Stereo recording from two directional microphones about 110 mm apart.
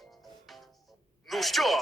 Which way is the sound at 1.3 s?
Centre (ahead or behind).